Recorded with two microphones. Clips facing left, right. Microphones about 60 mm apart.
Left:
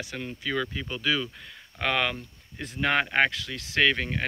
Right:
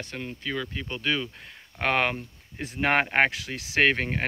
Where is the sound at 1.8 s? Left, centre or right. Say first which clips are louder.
Right 2 dB; right.